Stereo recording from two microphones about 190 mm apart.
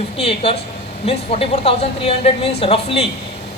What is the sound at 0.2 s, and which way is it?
A man's voice, 30° left (ahead or behind).